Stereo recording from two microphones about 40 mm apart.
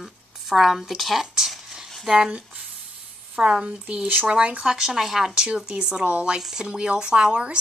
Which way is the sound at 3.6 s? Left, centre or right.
Right.